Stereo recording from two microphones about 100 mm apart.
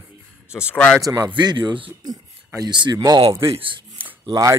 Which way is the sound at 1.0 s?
35° right (ahead or behind).